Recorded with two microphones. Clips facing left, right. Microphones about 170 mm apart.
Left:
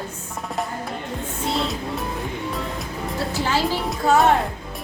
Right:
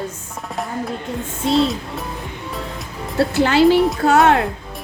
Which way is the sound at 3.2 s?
65° right (ahead or behind).